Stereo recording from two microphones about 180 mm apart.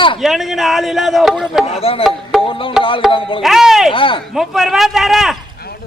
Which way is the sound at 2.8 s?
30° left (ahead or behind).